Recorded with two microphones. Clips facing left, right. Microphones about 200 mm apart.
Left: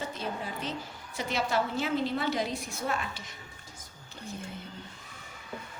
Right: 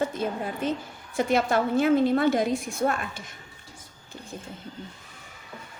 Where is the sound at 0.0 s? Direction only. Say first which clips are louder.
Right 8 dB; 50° right (ahead or behind).